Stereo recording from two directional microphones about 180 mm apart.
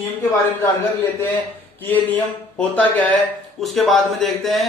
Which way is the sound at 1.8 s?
10° left (ahead or behind).